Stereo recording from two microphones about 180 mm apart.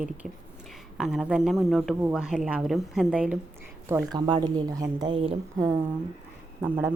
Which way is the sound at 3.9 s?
20° right (ahead or behind).